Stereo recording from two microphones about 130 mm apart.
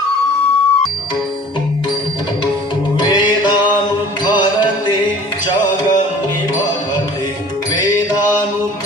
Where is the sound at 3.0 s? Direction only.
35° left (ahead or behind).